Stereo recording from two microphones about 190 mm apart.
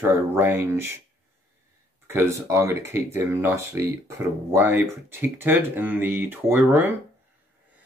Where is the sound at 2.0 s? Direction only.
15° right (ahead or behind).